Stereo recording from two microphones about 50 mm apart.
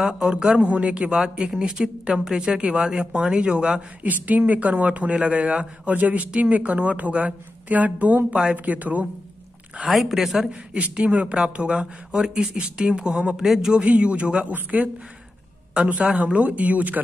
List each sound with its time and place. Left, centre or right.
0.3 s speech: centre
4.0 s speech: right
9.8 s a woman's voice: centre
10.7 s speech: right; by 13.7 s centre
13.7 s speech: right
16.0 s speech: centre